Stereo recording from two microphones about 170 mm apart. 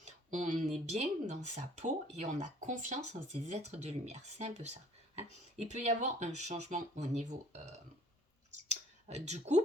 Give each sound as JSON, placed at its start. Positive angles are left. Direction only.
{"t": 0.0, "sound": "a sound", "side_deg": -45}
{"t": 0.9, "sound": "speech", "side_deg": -40}
{"t": 8.5, "sound": "clicking", "side_deg": -40}